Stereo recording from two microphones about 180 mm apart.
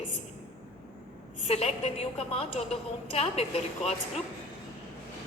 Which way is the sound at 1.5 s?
35° left (ahead or behind).